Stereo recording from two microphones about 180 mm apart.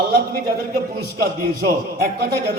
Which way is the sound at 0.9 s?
60° right (ahead or behind).